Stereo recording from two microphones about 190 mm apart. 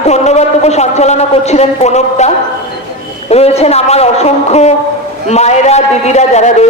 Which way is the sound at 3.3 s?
35° left (ahead or behind).